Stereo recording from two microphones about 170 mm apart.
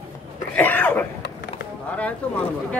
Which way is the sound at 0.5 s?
10° left (ahead or behind).